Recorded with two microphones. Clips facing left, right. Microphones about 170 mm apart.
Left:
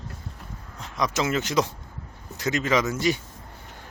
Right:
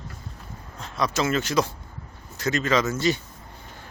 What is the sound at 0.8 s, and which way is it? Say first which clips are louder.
Speech: right 1 dB; 15° left (ahead or behind).